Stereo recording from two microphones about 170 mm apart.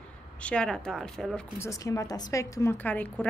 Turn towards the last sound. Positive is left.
turn(degrees=10)  # may be behind; listen again after turning